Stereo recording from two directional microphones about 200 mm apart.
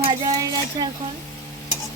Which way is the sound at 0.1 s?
20° right (ahead or behind).